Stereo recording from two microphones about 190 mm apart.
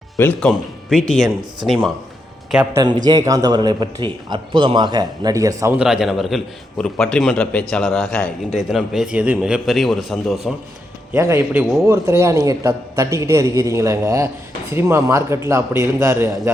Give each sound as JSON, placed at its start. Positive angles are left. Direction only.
{"t": 0.2, "sound": "a man's voice", "side_deg": 5}
{"t": 2.7, "sound": "a man's voice", "side_deg": -20}
{"t": 11.1, "sound": "a man's voice", "side_deg": -15}